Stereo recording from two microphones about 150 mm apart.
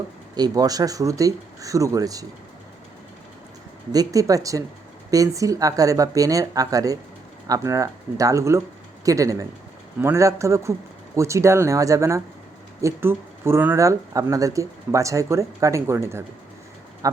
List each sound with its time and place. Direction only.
0.3 s speech: 25° right (ahead or behind)
3.9 s speech: 25° right (ahead or behind)